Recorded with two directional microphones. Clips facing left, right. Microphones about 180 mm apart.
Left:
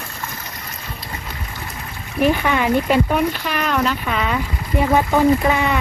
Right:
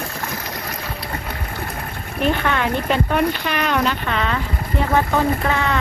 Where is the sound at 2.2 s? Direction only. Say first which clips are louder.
Left 3 dB; 10° left (ahead or behind).